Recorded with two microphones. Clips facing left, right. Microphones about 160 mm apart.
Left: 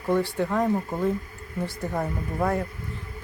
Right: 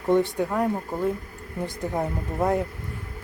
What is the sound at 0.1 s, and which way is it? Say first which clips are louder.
Speech: right 3 dB; 20° right (ahead or behind).